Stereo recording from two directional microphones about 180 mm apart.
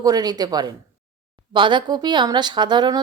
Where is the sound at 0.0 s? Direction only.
20° right (ahead or behind).